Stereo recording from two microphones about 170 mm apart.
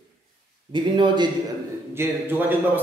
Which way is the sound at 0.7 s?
30° right (ahead or behind).